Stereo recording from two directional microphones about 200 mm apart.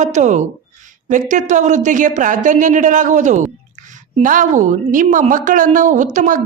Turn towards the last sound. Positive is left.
turn(degrees=-40)  # may be behind; listen again after turning